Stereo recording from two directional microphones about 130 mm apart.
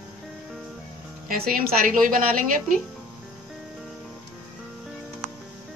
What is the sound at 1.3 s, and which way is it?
Speech, 90° right.